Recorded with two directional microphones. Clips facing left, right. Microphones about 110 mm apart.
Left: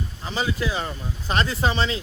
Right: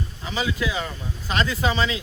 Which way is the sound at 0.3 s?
40° left (ahead or behind).